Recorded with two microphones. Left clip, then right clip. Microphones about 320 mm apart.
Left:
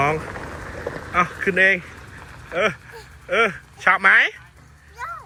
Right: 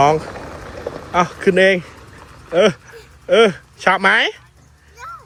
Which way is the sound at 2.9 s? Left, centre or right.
Centre.